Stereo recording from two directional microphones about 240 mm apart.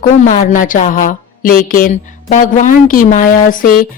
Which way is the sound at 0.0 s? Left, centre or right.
Left.